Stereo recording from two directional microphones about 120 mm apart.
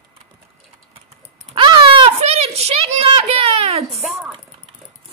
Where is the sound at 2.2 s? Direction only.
60° right (ahead or behind).